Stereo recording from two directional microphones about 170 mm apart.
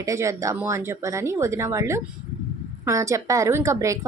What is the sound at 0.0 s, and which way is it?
A woman's voice, 20° right (ahead or behind).